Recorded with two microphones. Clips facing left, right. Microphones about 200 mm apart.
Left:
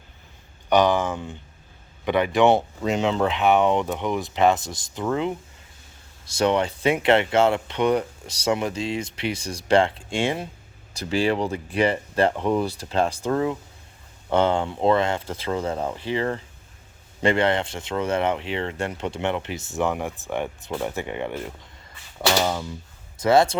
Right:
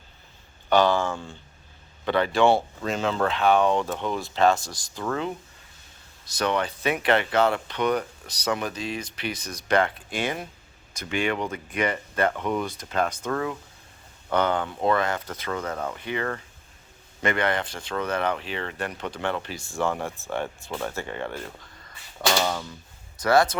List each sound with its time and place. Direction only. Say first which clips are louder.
0.7 s speech: left 2 dB; 15° left (ahead or behind)